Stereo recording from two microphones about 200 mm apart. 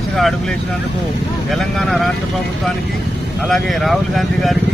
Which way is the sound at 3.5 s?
Centre (ahead or behind).